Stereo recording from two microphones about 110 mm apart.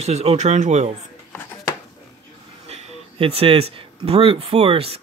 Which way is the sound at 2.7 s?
65° right (ahead or behind).